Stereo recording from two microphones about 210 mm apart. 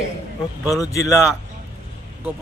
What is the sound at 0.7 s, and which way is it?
Speech, 15° left (ahead or behind).